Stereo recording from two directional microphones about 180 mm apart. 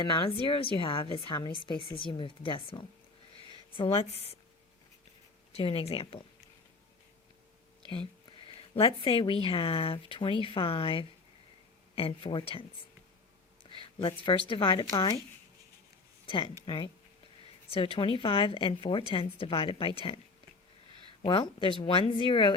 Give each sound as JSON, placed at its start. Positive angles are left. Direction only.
{"t": 0.0, "sound": "a woman's voice", "side_deg": 30}
{"t": 5.5, "sound": "speech", "side_deg": 30}
{"t": 8.7, "sound": "a woman's voice", "side_deg": 30}
{"t": 13.7, "sound": "speech", "side_deg": 30}
{"t": 16.2, "sound": "a woman's voice", "side_deg": 30}
{"t": 21.2, "sound": "a woman's voice", "side_deg": 25}